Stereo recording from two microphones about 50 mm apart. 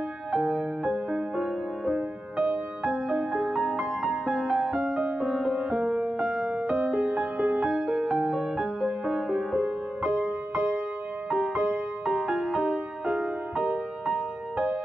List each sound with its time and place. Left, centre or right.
0.3 s music: centre
6.8 s music: centre